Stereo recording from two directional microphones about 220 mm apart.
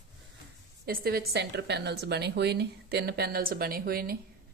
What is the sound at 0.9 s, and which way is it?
A woman's voice, 45° right (ahead or behind).